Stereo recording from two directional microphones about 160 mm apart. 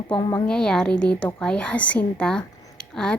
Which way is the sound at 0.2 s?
25° left (ahead or behind).